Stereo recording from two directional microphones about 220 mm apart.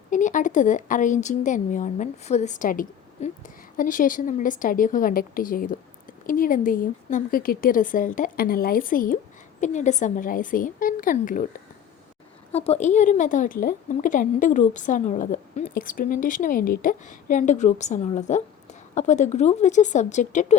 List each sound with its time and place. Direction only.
0.1 s a woman's voice: 35° left (ahead or behind)
12.5 s a woman's voice: 30° left (ahead or behind)